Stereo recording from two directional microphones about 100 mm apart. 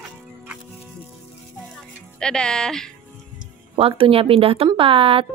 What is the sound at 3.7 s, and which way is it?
A woman's voice, 70° right (ahead or behind).